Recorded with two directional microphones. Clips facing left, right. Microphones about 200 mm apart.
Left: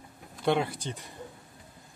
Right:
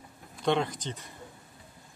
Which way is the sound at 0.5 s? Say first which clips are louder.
Left 1 dB; 10° left (ahead or behind).